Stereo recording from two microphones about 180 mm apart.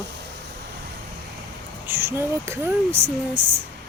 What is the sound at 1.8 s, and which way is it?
Speech, 10° right (ahead or behind).